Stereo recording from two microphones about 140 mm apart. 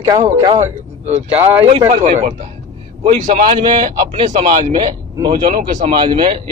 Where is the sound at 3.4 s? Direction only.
40° right (ahead or behind).